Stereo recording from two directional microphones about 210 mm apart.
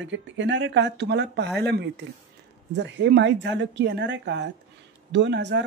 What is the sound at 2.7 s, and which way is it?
A woman's voice, 60° right (ahead or behind).